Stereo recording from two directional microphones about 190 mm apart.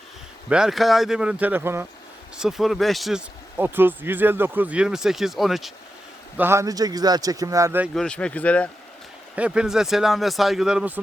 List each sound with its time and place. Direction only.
0.5 s speech: centre (ahead or behind)
2.4 s speech: centre (ahead or behind)
6.3 s speech: 10° right (ahead or behind)
7.9 s speech: 5° left (ahead or behind)
9.3 s speech: 5° right (ahead or behind)